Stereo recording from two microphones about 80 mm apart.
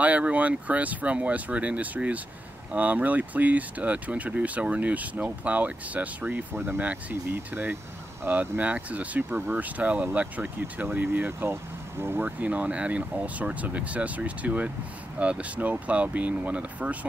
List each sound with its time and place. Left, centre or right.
0.0 s speech: centre